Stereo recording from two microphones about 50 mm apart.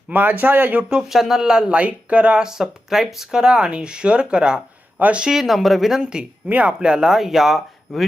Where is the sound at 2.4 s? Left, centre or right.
Centre.